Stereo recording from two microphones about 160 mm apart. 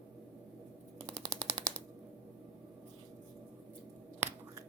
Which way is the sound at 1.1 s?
40° right (ahead or behind).